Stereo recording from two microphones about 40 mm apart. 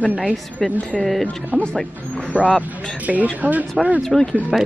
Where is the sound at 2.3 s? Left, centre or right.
Right.